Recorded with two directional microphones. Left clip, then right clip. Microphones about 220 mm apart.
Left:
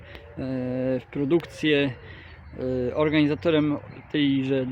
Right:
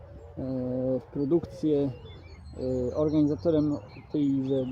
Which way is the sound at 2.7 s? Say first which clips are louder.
Left 4 dB; 25° left (ahead or behind).